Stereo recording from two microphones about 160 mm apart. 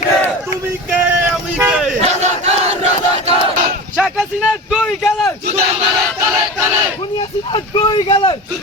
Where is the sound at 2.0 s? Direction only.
45° right (ahead or behind).